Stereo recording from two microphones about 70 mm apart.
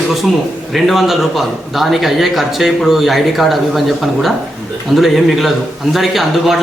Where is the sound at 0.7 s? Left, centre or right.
Centre.